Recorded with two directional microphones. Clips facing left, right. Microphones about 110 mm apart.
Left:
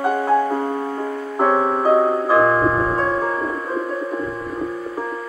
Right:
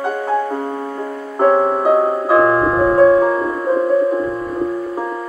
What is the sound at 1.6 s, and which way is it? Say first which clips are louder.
Music: right 2 dB; 5° right (ahead or behind).